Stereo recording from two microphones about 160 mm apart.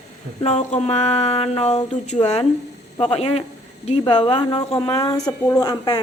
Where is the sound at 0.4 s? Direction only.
45° left (ahead or behind).